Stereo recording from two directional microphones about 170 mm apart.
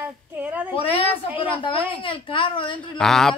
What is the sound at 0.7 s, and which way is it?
Speech, 35° left (ahead or behind).